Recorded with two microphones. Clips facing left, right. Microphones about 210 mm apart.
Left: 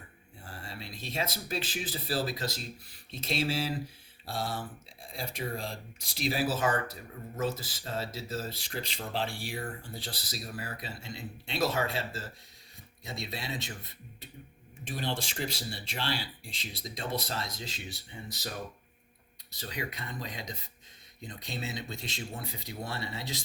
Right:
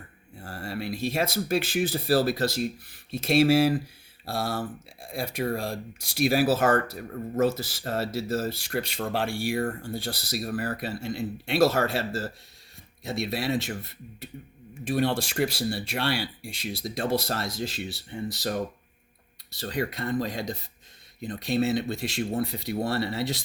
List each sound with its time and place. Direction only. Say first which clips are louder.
0.4 s speech: right 11 dB; 70° right (ahead or behind)
6.7 s speech: right 8 dB; 65° right (ahead or behind)
19.5 s speech: right 9 dB; 65° right (ahead or behind)